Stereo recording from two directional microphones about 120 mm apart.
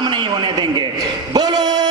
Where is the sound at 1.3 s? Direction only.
35° right (ahead or behind).